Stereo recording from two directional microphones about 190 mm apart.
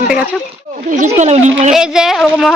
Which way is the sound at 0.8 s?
40° right (ahead or behind).